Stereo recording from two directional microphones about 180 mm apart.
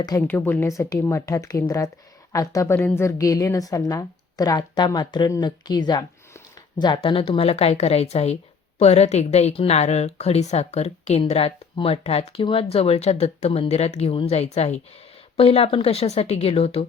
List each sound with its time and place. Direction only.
0.0 s a woman's voice: 15° left (ahead or behind); by 16.8 s 30° left (ahead or behind)